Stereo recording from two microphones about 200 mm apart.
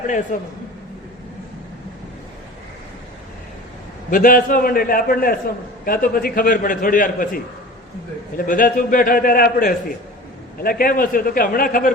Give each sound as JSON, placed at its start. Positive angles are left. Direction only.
{"t": 0.3, "sound": "a man's voice", "side_deg": 40}
{"t": 4.1, "sound": "a man's voice", "side_deg": 45}